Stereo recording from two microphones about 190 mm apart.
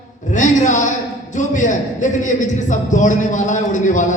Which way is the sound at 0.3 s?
40° left (ahead or behind).